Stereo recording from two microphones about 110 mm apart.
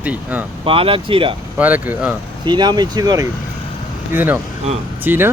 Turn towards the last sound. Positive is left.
turn(degrees=-20)  # may be behind; listen again after turning